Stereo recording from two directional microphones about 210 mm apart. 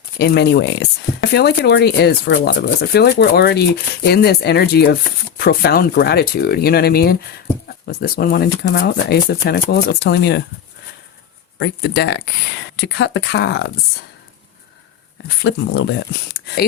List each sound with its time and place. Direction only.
0.2 s speech: 55° left (ahead or behind)
11.6 s speech: 55° left (ahead or behind)
15.4 s speech: 60° left (ahead or behind)